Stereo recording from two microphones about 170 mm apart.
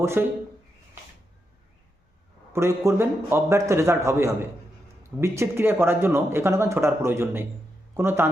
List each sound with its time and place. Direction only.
0.0 s speech: 15° right (ahead or behind)
2.5 s speech: 15° right (ahead or behind)